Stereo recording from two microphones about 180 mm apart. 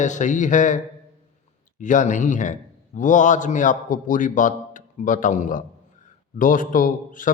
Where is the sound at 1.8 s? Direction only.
45° left (ahead or behind).